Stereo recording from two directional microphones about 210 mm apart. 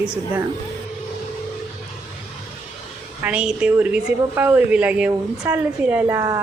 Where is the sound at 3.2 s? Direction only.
5° right (ahead or behind).